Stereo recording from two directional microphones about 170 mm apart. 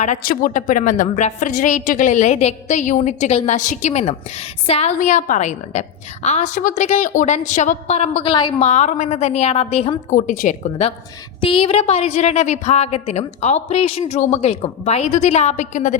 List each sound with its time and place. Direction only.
0.0 s a woman's voice: 50° left (ahead or behind); by 4.9 s 35° left (ahead or behind)
4.9 s a woman's voice: 45° left (ahead or behind)
11.3 s a woman's voice: 30° left (ahead or behind); by 16.0 s 45° left (ahead or behind)